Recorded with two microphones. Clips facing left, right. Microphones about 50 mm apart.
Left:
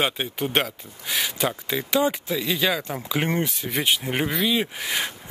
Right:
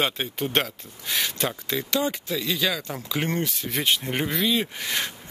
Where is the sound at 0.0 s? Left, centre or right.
Centre.